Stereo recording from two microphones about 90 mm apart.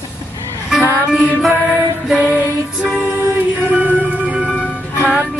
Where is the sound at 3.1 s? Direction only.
25° right (ahead or behind); by 4.8 s 5° right (ahead or behind).